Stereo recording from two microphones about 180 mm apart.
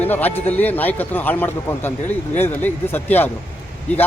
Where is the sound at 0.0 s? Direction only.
10° left (ahead or behind).